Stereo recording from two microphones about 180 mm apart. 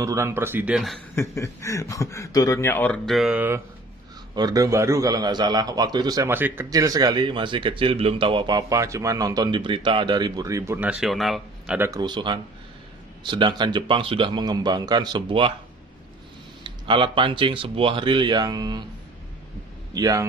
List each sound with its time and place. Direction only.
0.0 s speech: 15° right (ahead or behind)
1.1 s a man's voice: 15° left (ahead or behind); by 11.9 s 5° right (ahead or behind)
11.9 s a man's voice: 25° right (ahead or behind)
16.6 s a man's voice: 30° right (ahead or behind)
19.9 s a man's voice: 20° right (ahead or behind)